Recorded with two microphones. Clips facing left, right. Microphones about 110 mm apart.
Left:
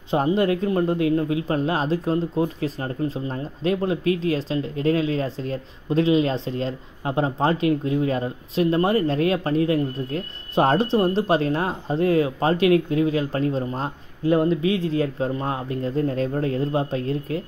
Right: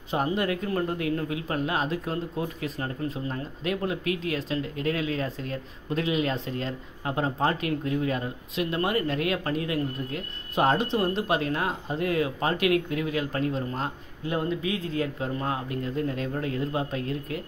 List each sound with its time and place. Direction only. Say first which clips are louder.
0.1 s speech: left 6 dB; 30° left (ahead or behind)